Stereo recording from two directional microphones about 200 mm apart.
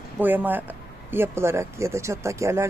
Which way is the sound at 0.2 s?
10° right (ahead or behind).